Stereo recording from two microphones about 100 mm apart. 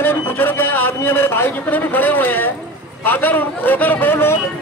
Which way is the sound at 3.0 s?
20° left (ahead or behind).